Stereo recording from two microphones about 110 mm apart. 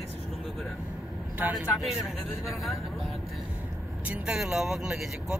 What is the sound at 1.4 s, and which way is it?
Speech, 15° right (ahead or behind).